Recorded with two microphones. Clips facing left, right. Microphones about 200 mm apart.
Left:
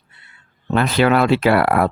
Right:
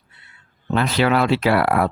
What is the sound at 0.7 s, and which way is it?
Speech, 55° left (ahead or behind).